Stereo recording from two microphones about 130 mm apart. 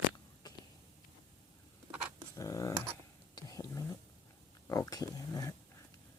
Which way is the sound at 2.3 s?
25° left (ahead or behind).